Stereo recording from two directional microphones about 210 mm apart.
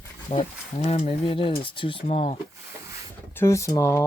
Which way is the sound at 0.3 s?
30° left (ahead or behind).